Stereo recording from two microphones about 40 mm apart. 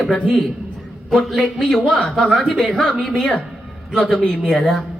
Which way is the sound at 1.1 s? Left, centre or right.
Centre.